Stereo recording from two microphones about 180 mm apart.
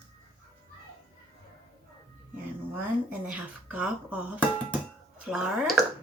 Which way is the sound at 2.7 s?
10° right (ahead or behind).